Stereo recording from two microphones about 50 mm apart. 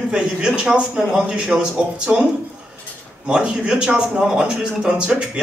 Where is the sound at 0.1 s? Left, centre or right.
Centre.